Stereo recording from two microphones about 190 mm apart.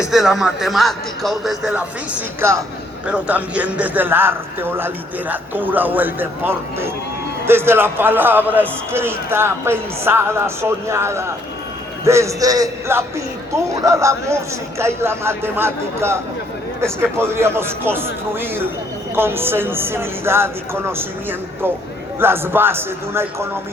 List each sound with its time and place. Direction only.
0.0 s speech: centre (ahead or behind)
2.4 s speech: 15° right (ahead or behind)